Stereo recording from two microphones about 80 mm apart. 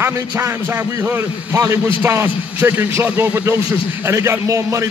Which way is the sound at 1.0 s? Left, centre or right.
Right.